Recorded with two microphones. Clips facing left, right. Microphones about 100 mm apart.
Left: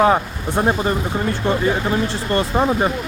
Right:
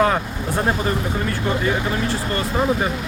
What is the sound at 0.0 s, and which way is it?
Speech, 20° left (ahead or behind).